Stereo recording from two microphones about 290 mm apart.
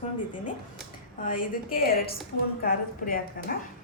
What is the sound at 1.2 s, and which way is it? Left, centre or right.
A woman's voice, left.